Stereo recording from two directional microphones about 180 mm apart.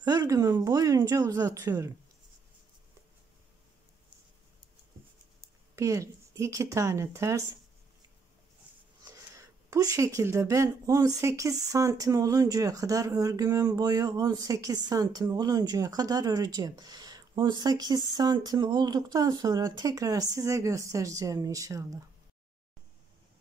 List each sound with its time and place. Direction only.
0.0 s speech: 20° right (ahead or behind)
5.8 s a woman's voice: 15° right (ahead or behind)
9.0 s speech: 15° right (ahead or behind)